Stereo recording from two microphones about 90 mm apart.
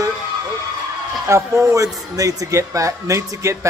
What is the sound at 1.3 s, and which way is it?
Speech, 35° right (ahead or behind).